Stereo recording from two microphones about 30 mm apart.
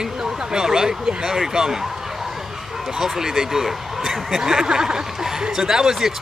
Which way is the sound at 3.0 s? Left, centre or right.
Centre.